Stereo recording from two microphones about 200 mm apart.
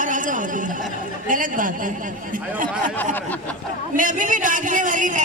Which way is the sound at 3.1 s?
10° left (ahead or behind).